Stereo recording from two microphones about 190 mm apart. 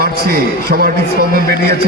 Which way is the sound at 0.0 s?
55° right (ahead or behind).